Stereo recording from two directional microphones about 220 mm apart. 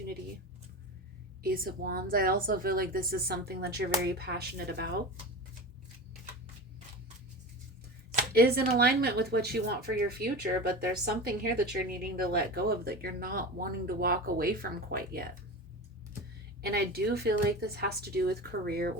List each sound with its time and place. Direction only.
1.4 s speech: 40° right (ahead or behind)
8.3 s speech: 45° right (ahead or behind)
16.6 s speech: 45° right (ahead or behind)